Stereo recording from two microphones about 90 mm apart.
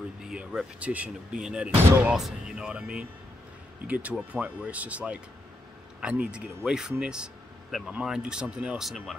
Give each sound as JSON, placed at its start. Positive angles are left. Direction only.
{"t": 0.2, "sound": "speech", "side_deg": -10}